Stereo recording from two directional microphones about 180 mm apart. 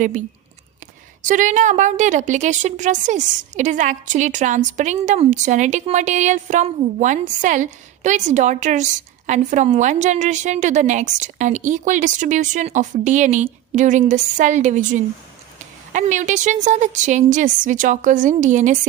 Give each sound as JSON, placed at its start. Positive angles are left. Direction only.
{"t": 1.2, "sound": "a woman's voice", "side_deg": -45}